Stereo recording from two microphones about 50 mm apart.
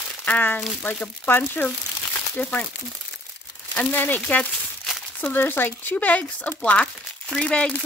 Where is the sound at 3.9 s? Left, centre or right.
Left.